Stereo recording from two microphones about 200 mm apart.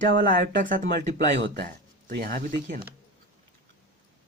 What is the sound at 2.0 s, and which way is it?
Speech, 50° right (ahead or behind).